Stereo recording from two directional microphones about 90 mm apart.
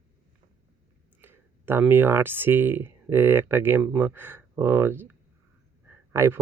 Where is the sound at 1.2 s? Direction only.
25° right (ahead or behind).